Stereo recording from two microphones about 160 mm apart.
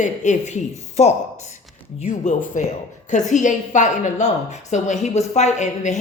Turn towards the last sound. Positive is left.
turn(degrees=45)  # may be behind; listen again after turning